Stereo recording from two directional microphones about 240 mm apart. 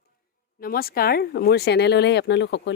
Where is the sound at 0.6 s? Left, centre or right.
Left.